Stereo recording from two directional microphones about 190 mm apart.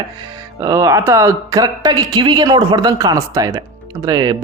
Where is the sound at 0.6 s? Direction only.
20° right (ahead or behind).